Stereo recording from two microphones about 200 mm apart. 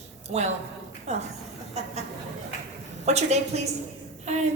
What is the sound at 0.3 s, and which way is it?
Speech, 35° right (ahead or behind).